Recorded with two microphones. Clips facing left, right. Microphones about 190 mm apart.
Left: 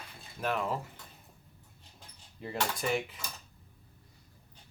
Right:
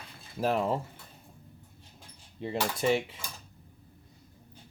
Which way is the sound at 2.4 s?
25° right (ahead or behind).